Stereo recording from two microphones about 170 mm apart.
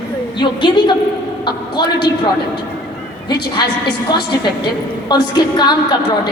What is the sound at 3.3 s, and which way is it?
A woman's voice, 25° left (ahead or behind).